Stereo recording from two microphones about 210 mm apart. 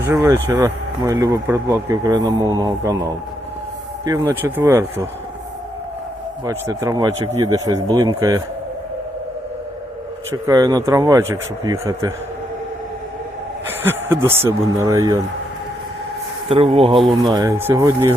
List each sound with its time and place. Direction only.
0.1 s speech: 15° right (ahead or behind)
6.4 s speech: 15° right (ahead or behind)
10.3 s speech: 20° right (ahead or behind)
13.7 s a sound: 10° right (ahead or behind)
14.4 s speech: 15° right (ahead or behind)
16.5 s speech: 30° right (ahead or behind)